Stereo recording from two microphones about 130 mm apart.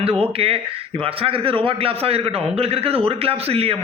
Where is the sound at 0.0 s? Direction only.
50° right (ahead or behind).